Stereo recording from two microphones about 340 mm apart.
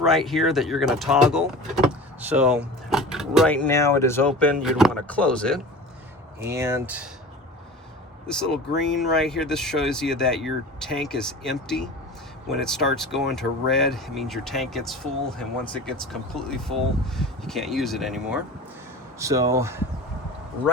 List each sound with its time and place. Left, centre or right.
0.0 s speech: centre
8.3 s speech: centre